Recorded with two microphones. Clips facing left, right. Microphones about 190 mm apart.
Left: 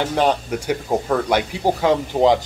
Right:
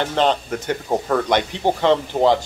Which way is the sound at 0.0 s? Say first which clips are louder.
Even; 10° left (ahead or behind).